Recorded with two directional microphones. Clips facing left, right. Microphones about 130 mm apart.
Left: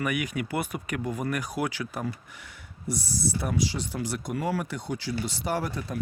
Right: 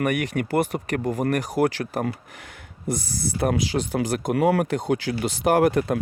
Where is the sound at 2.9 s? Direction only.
60° right (ahead or behind).